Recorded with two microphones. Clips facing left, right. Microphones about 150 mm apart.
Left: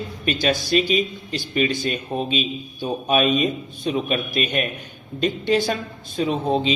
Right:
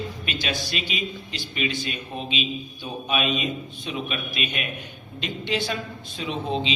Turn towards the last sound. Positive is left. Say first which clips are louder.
# left 6 dB
turn(degrees=45)  # may be behind; listen again after turning